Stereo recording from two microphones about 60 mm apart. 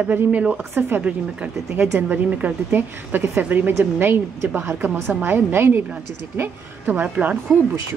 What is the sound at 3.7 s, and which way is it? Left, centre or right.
A woman's voice, right.